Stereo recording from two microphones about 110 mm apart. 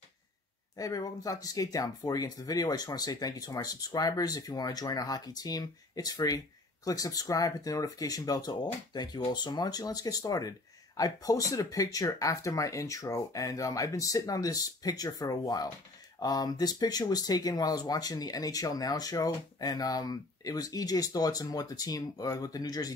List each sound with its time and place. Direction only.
0.7 s speech: 35° left (ahead or behind)